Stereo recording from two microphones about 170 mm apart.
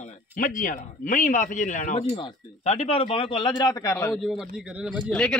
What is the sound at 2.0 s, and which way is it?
Speech, 30° left (ahead or behind).